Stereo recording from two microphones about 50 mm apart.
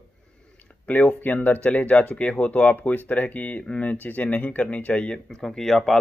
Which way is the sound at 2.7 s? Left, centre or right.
Left.